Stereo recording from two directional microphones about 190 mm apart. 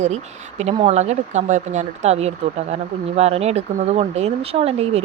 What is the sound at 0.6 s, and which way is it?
Speech, 35° right (ahead or behind).